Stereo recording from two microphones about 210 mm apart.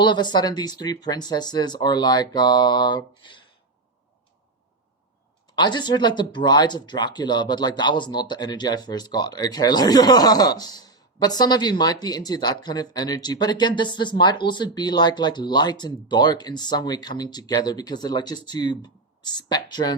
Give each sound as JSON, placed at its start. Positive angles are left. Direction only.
{"t": 0.0, "sound": "speech", "side_deg": 20}
{"t": 5.5, "sound": "speech", "side_deg": 20}